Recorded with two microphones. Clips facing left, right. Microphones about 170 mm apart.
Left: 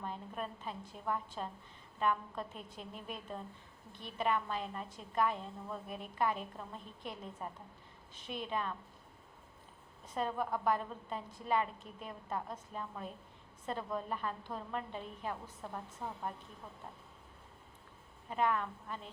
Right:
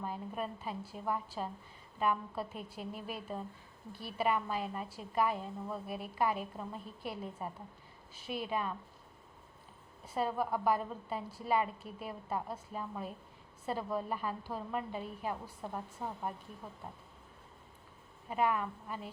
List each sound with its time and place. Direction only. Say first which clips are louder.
0.0 s a woman's voice: right 3 dB; 5° right (ahead or behind)
10.2 s a woman's voice: right 2 dB; 5° right (ahead or behind)
18.3 s a woman's voice: right 1 dB; 10° right (ahead or behind)